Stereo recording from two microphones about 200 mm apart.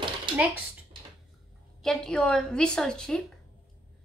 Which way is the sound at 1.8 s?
Centre (ahead or behind).